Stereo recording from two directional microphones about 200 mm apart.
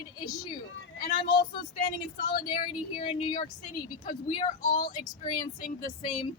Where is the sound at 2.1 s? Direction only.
45° left (ahead or behind).